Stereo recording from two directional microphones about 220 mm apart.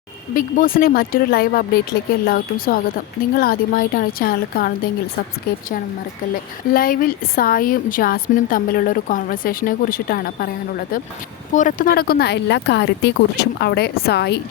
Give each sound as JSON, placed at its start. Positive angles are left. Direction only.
{"t": 0.3, "sound": "a woman's voice", "side_deg": 40}
{"t": 6.7, "sound": "a woman's voice", "side_deg": 40}